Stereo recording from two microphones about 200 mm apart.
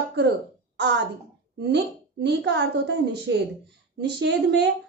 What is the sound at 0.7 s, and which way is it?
Speech, 60° right (ahead or behind).